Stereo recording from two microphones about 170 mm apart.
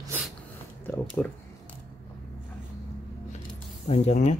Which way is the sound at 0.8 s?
10° left (ahead or behind).